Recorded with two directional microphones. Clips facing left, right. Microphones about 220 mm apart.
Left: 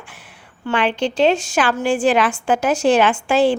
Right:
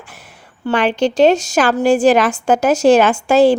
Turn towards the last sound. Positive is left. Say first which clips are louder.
# right 5 dB
turn(degrees=-40)  # may be behind; listen again after turning